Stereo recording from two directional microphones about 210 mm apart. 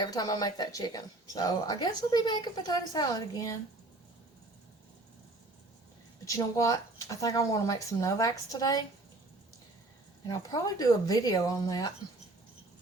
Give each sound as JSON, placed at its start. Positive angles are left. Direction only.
{"t": 0.0, "sound": "speech", "side_deg": 20}
{"t": 6.2, "sound": "speech", "side_deg": 15}
{"t": 10.2, "sound": "speech", "side_deg": 20}